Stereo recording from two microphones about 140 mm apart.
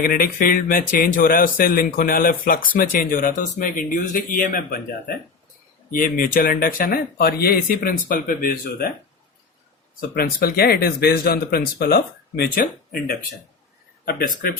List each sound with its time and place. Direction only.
0.0 s speech: 90° left
10.2 s speech: 90° left